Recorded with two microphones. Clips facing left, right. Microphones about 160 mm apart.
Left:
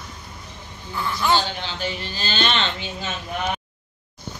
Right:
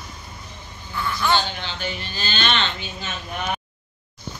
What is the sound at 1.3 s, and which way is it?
Speech, 35° left (ahead or behind).